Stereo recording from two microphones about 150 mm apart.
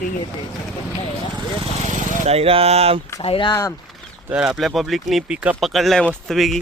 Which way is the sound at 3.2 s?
35° left (ahead or behind).